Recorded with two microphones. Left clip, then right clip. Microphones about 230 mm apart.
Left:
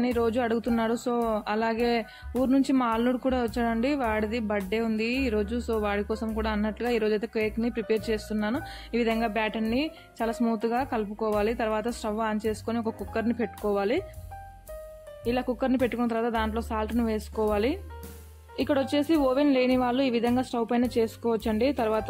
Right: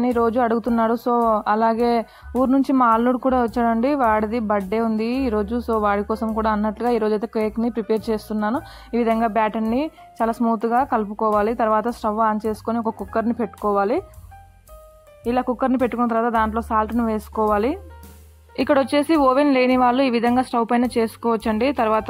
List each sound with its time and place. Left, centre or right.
0.3 s a woman's voice: centre
15.2 s a woman's voice: centre